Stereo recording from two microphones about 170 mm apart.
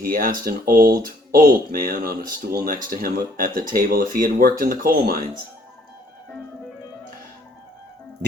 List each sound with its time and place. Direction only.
0.0 s speech: 60° right (ahead or behind)